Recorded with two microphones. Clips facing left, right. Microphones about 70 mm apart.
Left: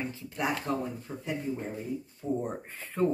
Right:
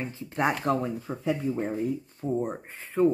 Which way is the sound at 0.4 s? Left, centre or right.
Right.